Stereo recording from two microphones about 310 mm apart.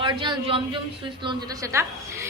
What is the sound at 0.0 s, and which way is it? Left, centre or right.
A woman's voice, centre.